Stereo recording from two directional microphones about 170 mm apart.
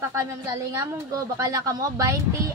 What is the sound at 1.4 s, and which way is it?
Speech, 20° right (ahead or behind).